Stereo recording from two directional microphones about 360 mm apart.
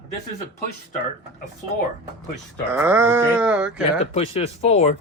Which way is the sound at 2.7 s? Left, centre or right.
Centre.